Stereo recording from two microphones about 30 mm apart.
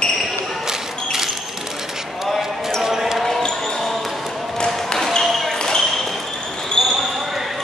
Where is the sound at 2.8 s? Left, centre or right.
Centre.